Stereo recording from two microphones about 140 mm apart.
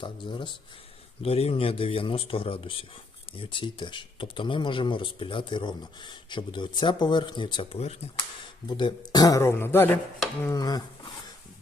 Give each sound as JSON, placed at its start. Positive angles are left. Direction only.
{"t": 0.0, "sound": "speech", "side_deg": 35}
{"t": 8.6, "sound": "speech", "side_deg": 30}
{"t": 10.5, "sound": "speech", "side_deg": 25}